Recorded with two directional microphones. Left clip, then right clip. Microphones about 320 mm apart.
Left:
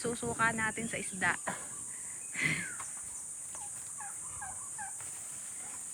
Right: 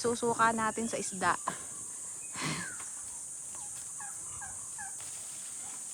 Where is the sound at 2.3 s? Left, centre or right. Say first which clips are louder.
Left 4 dB; centre.